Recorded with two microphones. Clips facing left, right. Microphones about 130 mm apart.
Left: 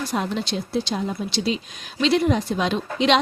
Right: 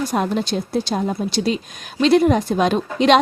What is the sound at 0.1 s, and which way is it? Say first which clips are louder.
Speech: right 5 dB; 45° right (ahead or behind).